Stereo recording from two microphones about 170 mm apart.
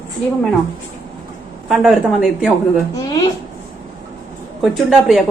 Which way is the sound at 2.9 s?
20° left (ahead or behind).